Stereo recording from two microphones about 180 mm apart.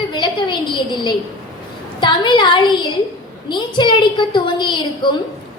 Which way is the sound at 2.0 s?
25° left (ahead or behind).